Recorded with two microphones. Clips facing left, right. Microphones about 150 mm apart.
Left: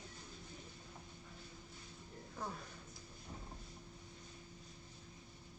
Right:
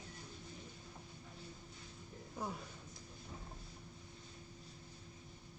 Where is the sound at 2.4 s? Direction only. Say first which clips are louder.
Right 2 dB; 15° right (ahead or behind).